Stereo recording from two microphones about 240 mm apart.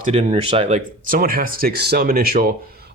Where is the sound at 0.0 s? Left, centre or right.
Right.